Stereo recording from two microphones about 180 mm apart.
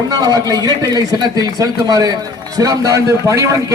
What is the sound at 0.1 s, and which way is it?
A man's voice, 20° right (ahead or behind).